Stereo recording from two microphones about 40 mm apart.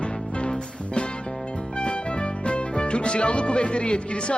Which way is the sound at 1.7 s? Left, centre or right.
Left.